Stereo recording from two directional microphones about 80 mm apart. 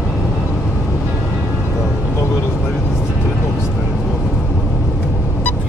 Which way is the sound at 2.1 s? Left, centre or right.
Left.